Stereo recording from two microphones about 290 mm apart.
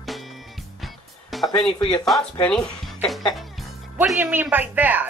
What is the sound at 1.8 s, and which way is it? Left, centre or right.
Speech, centre.